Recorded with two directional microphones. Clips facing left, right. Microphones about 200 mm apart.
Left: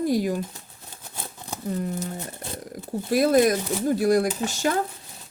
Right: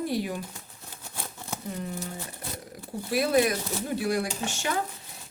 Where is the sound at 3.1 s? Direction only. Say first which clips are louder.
Left 5 dB; 45° left (ahead or behind).